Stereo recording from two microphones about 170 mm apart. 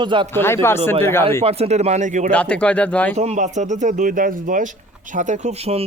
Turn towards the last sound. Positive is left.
turn(degrees=-40)  # may be behind; listen again after turning